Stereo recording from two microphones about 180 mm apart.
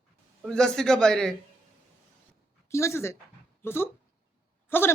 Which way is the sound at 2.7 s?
15° left (ahead or behind).